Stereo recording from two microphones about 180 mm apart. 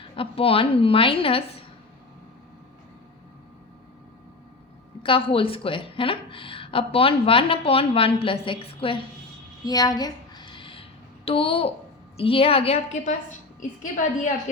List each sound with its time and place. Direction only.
0.0 s a woman's voice: 30° left (ahead or behind)
5.0 s speech: 30° left (ahead or behind)
9.6 s a sound: 20° left (ahead or behind)
11.3 s a woman's voice: 30° left (ahead or behind)